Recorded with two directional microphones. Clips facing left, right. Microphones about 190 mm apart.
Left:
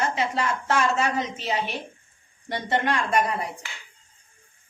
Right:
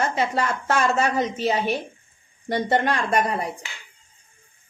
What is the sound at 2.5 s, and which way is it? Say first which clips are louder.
Speech: right 4 dB; 40° right (ahead or behind).